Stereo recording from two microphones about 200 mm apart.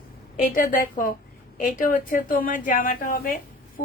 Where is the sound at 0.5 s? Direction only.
45° left (ahead or behind).